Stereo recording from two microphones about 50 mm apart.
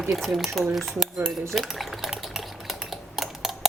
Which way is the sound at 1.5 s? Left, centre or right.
Centre.